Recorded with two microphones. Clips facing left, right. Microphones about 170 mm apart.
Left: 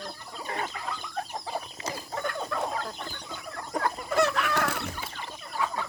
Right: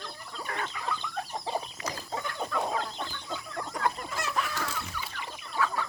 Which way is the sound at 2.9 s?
50° left (ahead or behind).